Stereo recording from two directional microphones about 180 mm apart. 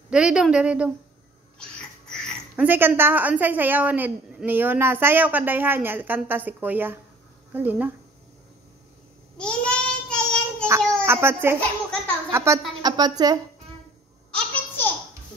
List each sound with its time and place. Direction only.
0.1 s a woman's voice: 5° right (ahead or behind)
1.6 s a sound: 5° left (ahead or behind)
2.5 s a woman's voice: 10° right (ahead or behind)
9.4 s child singing: 5° left (ahead or behind)
10.8 s a sound: 5° left (ahead or behind)
11.1 s a woman's voice: 15° right (ahead or behind)
14.3 s babbling: 10° left (ahead or behind)